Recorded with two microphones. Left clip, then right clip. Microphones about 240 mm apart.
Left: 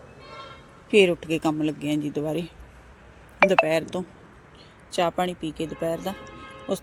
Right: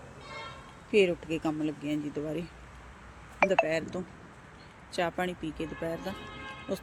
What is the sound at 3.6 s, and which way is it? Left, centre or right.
Speech, left.